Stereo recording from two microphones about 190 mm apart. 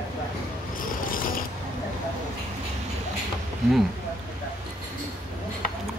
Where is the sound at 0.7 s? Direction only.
45° left (ahead or behind).